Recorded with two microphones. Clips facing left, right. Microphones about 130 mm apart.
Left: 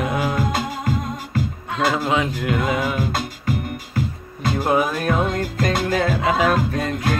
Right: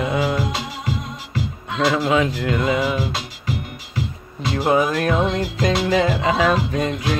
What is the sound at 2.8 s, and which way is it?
Music, 50° left (ahead or behind).